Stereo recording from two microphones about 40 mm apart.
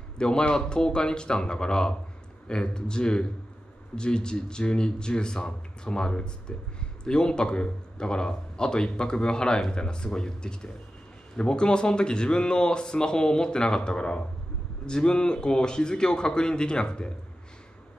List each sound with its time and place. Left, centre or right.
0.2 s speech: left